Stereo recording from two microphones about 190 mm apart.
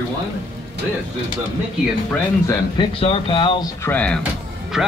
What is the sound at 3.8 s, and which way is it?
Speech, 5° left (ahead or behind).